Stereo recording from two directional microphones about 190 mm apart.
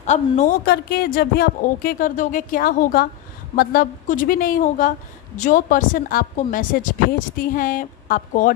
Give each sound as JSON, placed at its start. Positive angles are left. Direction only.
{"t": 0.0, "sound": "a woman's voice", "side_deg": 40}
{"t": 0.7, "sound": "a woman's voice", "side_deg": 55}